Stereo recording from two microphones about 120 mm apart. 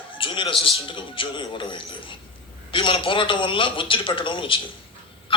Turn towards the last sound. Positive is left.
turn(degrees=45)  # may be behind; listen again after turning